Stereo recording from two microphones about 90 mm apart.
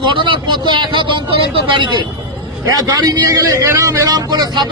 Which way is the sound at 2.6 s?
40° right (ahead or behind).